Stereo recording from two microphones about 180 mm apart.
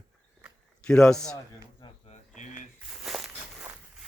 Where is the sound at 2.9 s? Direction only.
Centre (ahead or behind).